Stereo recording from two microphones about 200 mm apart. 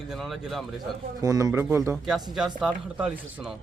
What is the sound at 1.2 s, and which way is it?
Speech, 15° right (ahead or behind).